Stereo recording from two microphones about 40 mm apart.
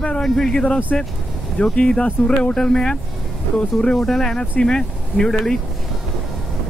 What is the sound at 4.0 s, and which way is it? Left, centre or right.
Speech, centre.